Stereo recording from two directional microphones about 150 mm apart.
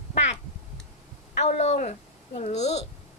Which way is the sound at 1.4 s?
45° left (ahead or behind).